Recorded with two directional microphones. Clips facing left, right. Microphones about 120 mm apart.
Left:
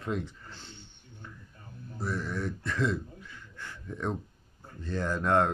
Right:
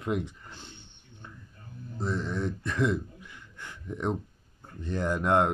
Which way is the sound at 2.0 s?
20° right (ahead or behind).